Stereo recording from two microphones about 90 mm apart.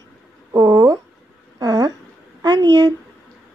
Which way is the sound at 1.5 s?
45° right (ahead or behind).